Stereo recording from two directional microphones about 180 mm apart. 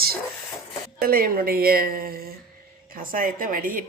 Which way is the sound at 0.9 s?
55° right (ahead or behind).